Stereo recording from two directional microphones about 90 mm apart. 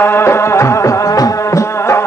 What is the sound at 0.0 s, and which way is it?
Music, 30° left (ahead or behind).